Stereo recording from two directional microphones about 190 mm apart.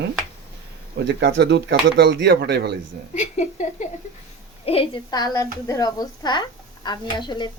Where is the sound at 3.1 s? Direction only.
40° left (ahead or behind).